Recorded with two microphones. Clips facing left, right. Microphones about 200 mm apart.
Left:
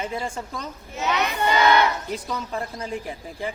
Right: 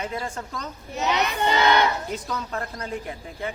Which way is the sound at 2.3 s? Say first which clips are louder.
Left 1 dB; 10° left (ahead or behind).